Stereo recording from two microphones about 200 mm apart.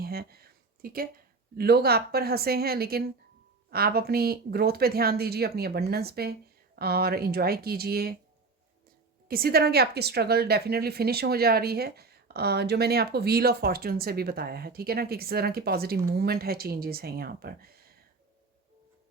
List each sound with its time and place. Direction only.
0.0 s a sound: 50° right (ahead or behind)
1.5 s a woman's voice: 50° right (ahead or behind)
9.3 s a woman's voice: 50° right (ahead or behind)